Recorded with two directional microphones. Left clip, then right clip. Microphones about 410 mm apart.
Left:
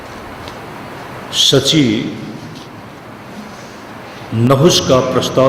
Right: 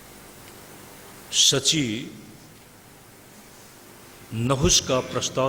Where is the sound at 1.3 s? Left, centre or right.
Right.